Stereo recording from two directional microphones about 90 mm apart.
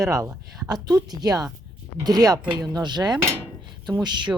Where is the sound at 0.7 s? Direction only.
45° right (ahead or behind).